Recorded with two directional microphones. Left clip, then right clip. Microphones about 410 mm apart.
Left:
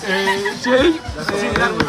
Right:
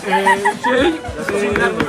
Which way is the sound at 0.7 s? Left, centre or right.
Left.